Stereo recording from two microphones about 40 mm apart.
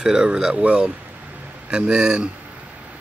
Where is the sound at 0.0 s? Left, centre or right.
Right.